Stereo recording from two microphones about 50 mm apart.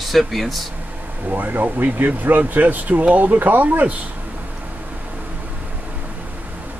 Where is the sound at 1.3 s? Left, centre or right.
Right.